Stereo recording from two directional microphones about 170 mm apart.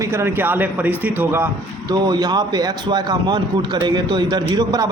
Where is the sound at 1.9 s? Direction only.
25° right (ahead or behind).